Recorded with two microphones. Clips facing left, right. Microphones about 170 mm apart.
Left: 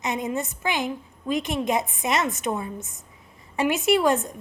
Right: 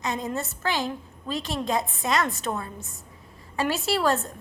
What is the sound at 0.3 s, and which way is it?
A woman's voice, 15° left (ahead or behind).